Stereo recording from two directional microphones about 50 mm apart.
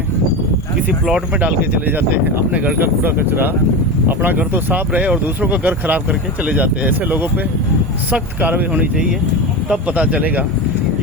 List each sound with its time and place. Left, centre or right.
2.0 s speech: right
8.4 s speech: right
9.8 s speech: right